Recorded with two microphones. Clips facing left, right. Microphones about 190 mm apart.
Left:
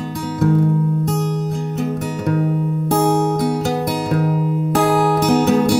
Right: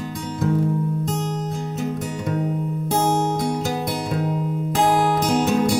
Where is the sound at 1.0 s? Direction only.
65° left (ahead or behind).